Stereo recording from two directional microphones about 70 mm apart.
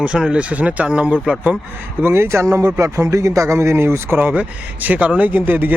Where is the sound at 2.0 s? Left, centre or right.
Right.